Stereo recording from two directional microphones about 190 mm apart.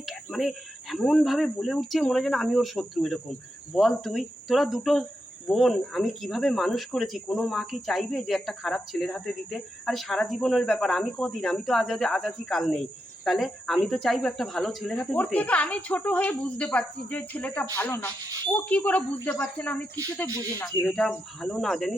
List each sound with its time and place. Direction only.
0.0 s speech: centre (ahead or behind)